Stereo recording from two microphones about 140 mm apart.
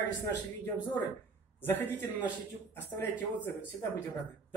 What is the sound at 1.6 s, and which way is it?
Speech, 15° left (ahead or behind).